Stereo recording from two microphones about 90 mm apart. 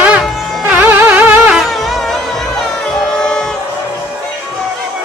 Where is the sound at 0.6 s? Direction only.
20° right (ahead or behind).